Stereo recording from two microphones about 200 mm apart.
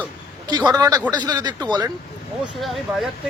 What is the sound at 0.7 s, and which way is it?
A man's voice, 20° right (ahead or behind).